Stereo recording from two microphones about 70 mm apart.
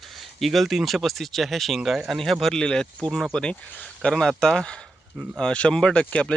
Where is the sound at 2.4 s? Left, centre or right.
Centre.